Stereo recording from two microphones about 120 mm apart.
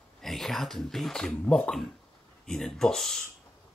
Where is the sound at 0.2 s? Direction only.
Centre (ahead or behind).